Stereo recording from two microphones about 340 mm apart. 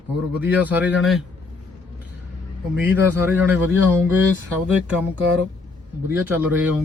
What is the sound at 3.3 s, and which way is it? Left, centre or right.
Speech, centre.